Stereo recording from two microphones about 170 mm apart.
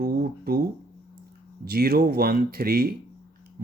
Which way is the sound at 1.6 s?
65° right (ahead or behind).